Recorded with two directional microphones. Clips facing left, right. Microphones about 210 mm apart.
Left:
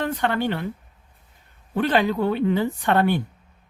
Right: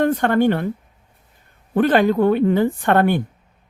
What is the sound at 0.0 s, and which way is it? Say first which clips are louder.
Speech: right 7 dB; 50° right (ahead or behind).